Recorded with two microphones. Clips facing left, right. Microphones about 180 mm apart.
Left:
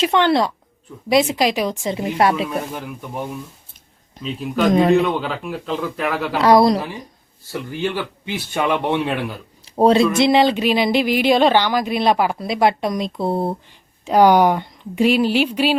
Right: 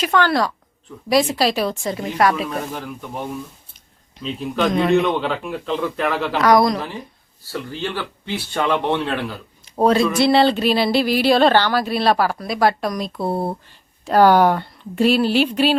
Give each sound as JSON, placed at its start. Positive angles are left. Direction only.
{"t": 0.0, "sound": "a woman's voice", "side_deg": 25}
{"t": 4.2, "sound": "speech", "side_deg": 5}
{"t": 4.7, "sound": "a man's voice", "side_deg": 40}
{"t": 4.9, "sound": "speech", "side_deg": 5}
{"t": 6.4, "sound": "a woman's voice", "side_deg": 30}
{"t": 6.7, "sound": "speech", "side_deg": 15}
{"t": 9.6, "sound": "speech", "side_deg": 25}